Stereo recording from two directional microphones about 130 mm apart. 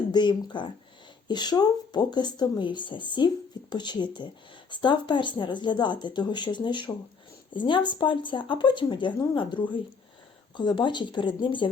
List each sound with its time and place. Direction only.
0.1 s speech: 35° left (ahead or behind)